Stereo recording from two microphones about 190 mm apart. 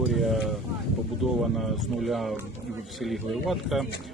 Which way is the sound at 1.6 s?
Centre (ahead or behind).